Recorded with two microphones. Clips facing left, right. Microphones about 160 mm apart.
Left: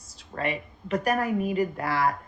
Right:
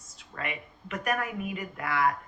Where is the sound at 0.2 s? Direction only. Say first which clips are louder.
Left 7 dB; 35° left (ahead or behind).